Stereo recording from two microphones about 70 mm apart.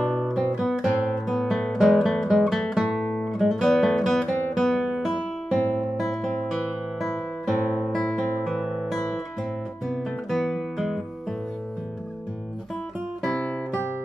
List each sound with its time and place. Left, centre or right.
0.0 s guitar: centre
3.3 s music: centre
9.8 s guitar: centre
13.2 s music: centre